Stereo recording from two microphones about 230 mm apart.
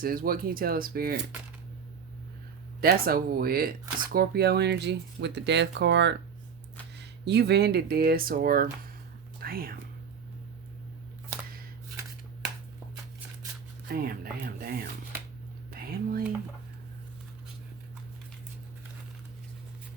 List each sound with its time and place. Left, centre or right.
0.0 s speech: right
2.8 s speech: right
13.9 s speech: right
15.7 s a sound: right